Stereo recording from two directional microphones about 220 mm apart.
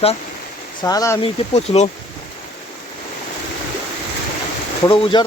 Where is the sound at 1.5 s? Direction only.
30° left (ahead or behind).